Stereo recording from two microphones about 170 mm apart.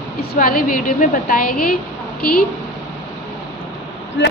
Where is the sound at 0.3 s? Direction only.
60° left (ahead or behind).